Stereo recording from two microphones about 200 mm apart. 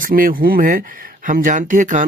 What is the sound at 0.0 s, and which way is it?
Speech, 45° right (ahead or behind).